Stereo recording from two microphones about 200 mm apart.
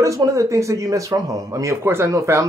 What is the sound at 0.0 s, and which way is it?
Speech, 15° right (ahead or behind).